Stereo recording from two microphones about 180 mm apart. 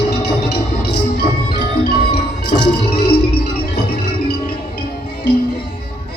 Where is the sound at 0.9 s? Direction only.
65° left (ahead or behind).